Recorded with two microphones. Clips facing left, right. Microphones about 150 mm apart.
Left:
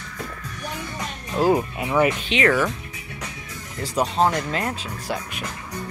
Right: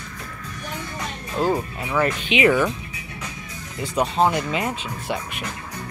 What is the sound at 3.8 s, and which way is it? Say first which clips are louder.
Speech: right 1 dB; centre (ahead or behind).